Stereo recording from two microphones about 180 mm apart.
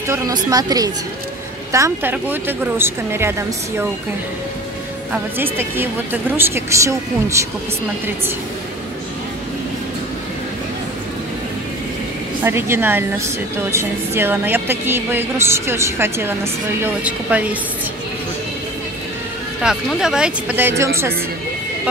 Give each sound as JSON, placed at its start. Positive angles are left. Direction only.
{"t": 0.0, "sound": "a woman's voice", "side_deg": -20}
{"t": 5.1, "sound": "a woman's voice", "side_deg": -10}
{"t": 12.4, "sound": "a woman's voice", "side_deg": -15}
{"t": 19.6, "sound": "speech", "side_deg": -5}